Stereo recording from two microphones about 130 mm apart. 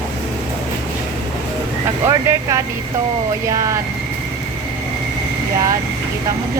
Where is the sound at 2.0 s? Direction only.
20° right (ahead or behind).